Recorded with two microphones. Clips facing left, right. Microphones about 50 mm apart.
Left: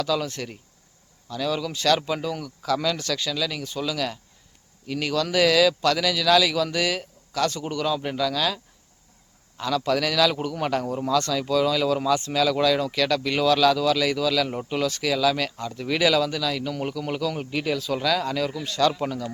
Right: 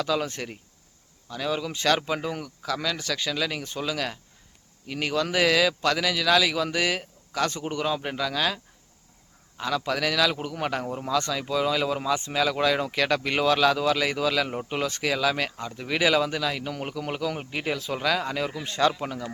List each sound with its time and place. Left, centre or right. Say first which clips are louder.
0.0 s a man's voice: left 1 dB; right
2.6 s speech: left 5 dB; centre
3.1 s a man's voice: left 1 dB; right